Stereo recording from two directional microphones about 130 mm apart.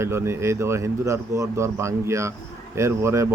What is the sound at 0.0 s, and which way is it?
A man's voice, 20° right (ahead or behind).